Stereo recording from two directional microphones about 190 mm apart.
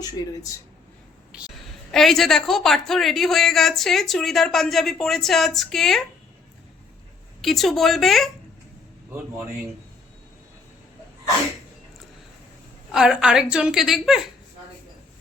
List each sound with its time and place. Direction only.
1.3 s a woman's voice: 5° right (ahead or behind)
7.4 s a woman's voice: centre (ahead or behind)
12.9 s a woman's voice: 5° right (ahead or behind)